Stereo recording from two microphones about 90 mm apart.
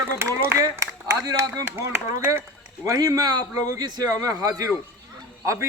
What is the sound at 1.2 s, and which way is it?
Speech, 45° right (ahead or behind).